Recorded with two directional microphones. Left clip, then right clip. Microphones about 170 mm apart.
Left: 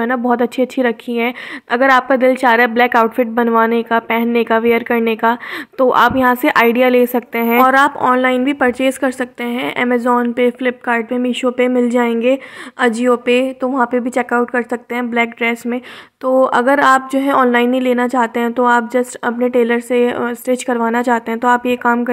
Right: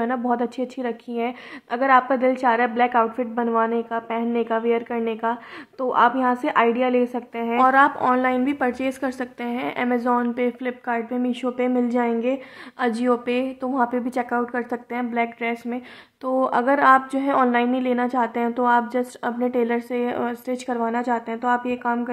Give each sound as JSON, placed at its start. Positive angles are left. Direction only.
{"t": 0.0, "sound": "a woman's voice", "side_deg": 25}